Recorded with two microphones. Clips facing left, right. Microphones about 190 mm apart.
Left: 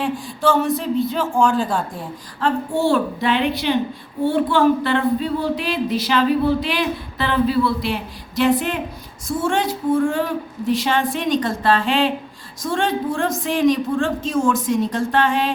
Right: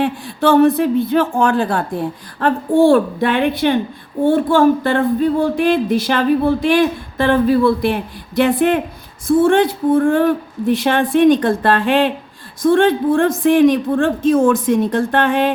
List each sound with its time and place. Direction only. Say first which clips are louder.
0.0 s speech: right 4 dB; 60° right (ahead or behind)